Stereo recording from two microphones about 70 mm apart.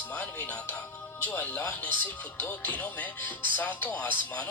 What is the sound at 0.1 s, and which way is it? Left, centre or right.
Music, left.